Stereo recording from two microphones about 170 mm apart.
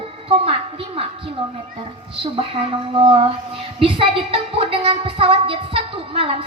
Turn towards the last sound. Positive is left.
turn(degrees=-35)  # may be behind; listen again after turning